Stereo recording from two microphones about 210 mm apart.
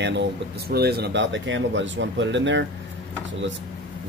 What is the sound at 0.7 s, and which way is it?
Speech, 50° right (ahead or behind).